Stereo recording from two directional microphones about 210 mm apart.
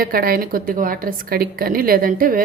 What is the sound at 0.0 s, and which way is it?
A woman's voice, 45° right (ahead or behind).